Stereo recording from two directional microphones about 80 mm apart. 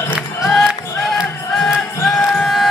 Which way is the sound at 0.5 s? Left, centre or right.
Centre.